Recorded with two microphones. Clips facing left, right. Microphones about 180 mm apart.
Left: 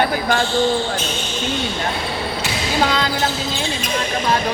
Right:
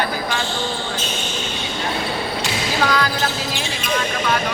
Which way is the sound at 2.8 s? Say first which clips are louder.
Even; 25° left (ahead or behind).